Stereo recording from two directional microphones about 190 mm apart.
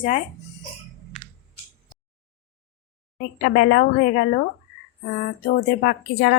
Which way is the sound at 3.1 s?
50° left (ahead or behind).